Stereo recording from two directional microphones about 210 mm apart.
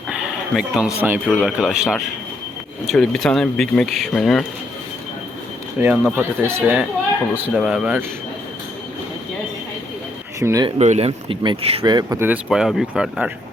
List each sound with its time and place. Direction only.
0.1 s a sound: 5° right (ahead or behind)
1.0 s speech: 10° right (ahead or behind)
5.8 s speech: 5° right (ahead or behind)
10.4 s speech: 15° right (ahead or behind)
10.8 s speech: 30° right (ahead or behind); by 13.3 s 5° right (ahead or behind)